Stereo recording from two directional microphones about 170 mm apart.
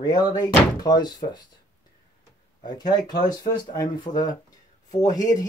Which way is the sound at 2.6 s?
25° left (ahead or behind).